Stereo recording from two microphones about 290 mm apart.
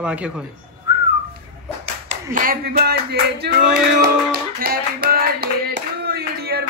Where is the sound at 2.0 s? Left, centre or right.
Right.